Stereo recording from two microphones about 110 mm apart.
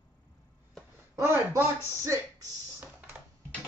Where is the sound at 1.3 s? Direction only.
25° right (ahead or behind).